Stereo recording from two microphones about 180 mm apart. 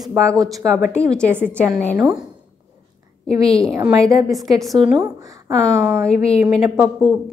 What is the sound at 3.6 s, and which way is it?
Speech, 15° right (ahead or behind).